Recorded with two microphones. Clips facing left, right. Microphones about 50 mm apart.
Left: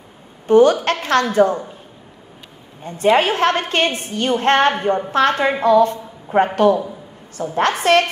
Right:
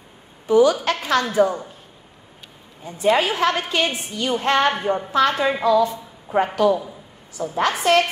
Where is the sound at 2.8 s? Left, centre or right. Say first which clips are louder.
Left 3 dB; left.